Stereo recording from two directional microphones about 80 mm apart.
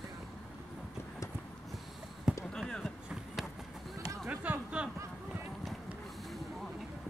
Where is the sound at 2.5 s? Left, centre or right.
Centre.